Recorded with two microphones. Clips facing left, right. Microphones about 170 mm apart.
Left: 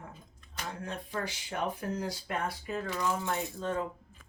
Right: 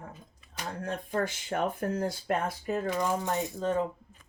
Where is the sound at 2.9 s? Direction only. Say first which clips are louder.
Right 2 dB; 20° right (ahead or behind).